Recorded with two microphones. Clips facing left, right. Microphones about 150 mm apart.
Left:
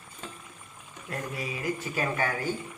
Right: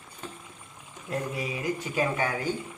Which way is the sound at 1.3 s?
20° right (ahead or behind).